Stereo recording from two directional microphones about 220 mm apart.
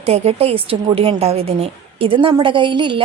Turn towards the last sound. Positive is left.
turn(degrees=-20)  # may be behind; listen again after turning